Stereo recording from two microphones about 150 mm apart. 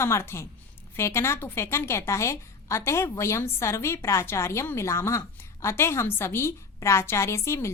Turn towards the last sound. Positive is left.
turn(degrees=20)  # may be behind; listen again after turning